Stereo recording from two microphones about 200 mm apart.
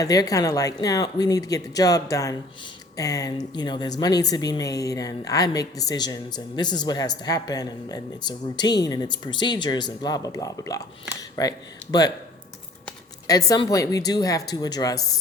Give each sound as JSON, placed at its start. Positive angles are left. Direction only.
{"t": 0.0, "sound": "speech", "side_deg": 20}
{"t": 13.2, "sound": "speech", "side_deg": 15}